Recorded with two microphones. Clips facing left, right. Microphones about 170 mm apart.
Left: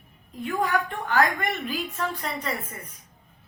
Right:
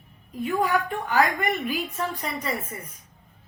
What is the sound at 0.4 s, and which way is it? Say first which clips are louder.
Speech: right 2 dB; 10° right (ahead or behind).